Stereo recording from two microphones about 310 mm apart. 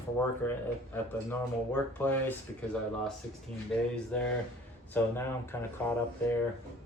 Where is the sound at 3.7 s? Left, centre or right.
Centre.